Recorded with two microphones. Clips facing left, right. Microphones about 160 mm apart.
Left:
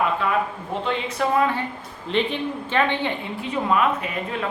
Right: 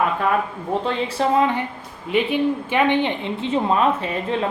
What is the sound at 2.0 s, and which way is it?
A woman's voice, 10° right (ahead or behind).